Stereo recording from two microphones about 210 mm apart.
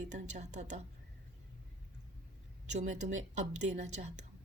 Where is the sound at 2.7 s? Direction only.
35° right (ahead or behind).